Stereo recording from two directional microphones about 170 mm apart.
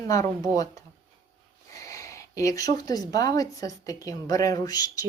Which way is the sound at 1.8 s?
20° left (ahead or behind).